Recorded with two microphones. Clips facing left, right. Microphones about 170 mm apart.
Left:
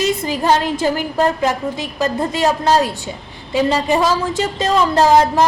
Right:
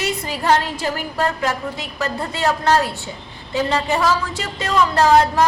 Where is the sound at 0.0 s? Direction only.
20° left (ahead or behind).